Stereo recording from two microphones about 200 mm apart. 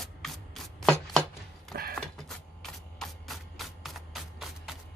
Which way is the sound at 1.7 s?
50° right (ahead or behind).